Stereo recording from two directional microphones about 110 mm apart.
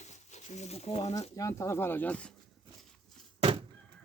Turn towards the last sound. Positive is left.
turn(degrees=-55)  # may be behind; listen again after turning